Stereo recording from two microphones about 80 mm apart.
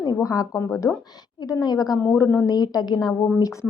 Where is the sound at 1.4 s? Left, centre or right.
Left.